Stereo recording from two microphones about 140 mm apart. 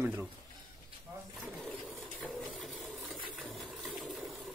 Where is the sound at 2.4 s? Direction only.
Centre (ahead or behind).